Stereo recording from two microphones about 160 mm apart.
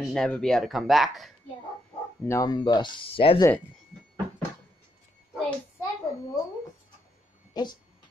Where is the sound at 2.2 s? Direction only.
20° left (ahead or behind).